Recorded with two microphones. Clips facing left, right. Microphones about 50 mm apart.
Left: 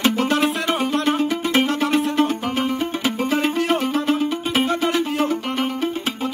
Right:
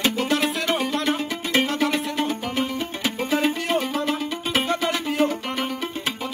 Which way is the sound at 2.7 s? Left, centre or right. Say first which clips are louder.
Left 4 dB; left.